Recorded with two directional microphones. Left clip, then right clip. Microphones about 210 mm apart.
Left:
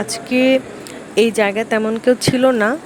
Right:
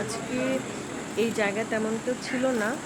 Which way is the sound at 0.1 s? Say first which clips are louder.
Left 14 dB; 45° left (ahead or behind).